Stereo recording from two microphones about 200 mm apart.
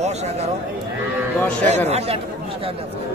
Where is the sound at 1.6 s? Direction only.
35° right (ahead or behind).